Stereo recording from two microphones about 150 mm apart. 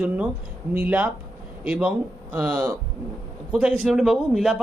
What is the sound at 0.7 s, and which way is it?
A man's voice, 10° right (ahead or behind).